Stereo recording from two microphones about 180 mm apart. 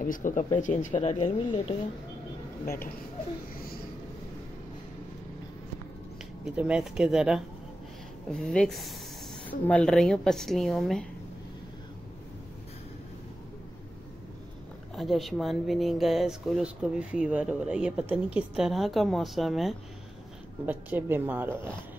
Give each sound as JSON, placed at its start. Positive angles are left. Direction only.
{"t": 0.0, "sound": "speech", "side_deg": 45}
{"t": 1.1, "sound": "speech", "side_deg": 30}
{"t": 2.6, "sound": "speech", "side_deg": 55}
{"t": 6.4, "sound": "speech", "side_deg": -5}
{"t": 15.0, "sound": "a woman's voice", "side_deg": 0}